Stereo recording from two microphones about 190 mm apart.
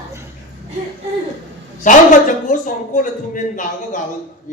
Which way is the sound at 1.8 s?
45° left (ahead or behind).